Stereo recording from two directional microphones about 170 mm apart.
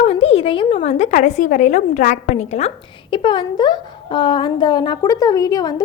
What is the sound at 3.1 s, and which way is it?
A woman's voice, 30° left (ahead or behind).